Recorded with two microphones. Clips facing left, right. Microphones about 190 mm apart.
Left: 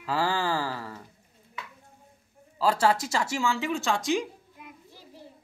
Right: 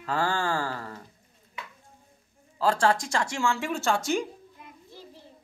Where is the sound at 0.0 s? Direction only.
5° left (ahead or behind).